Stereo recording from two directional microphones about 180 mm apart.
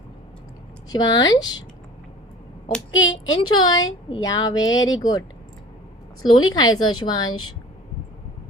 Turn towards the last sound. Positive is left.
turn(degrees=25)  # may be behind; listen again after turning